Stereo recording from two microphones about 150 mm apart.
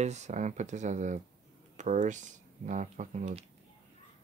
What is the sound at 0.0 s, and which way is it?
Speech, 50° right (ahead or behind).